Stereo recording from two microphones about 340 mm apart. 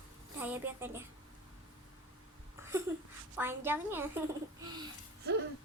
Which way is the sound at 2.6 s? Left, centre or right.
Centre.